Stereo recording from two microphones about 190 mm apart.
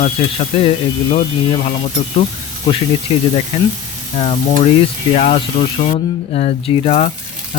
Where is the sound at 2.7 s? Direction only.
25° left (ahead or behind).